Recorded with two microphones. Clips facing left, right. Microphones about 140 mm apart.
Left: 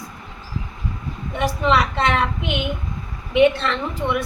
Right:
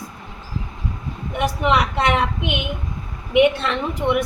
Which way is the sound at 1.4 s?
15° right (ahead or behind).